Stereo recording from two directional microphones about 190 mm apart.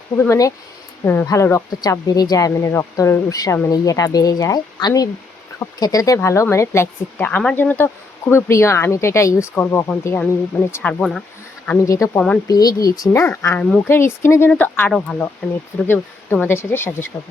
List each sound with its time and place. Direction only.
0.2 s speech: 15° left (ahead or behind)